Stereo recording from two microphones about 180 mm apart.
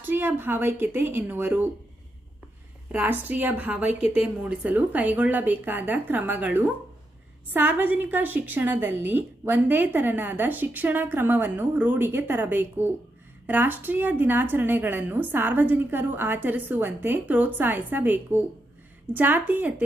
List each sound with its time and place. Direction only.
0.0 s a woman's voice: 10° right (ahead or behind)
2.9 s a woman's voice: 10° right (ahead or behind)